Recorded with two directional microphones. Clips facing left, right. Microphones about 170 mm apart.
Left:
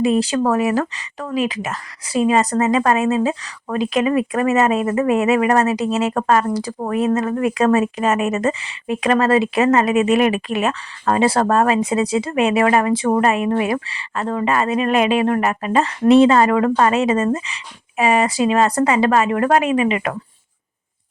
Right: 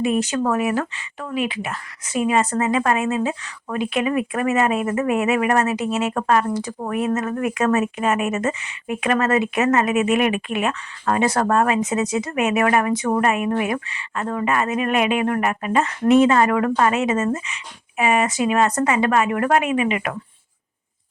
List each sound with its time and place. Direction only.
0.0 s speech: 30° left (ahead or behind)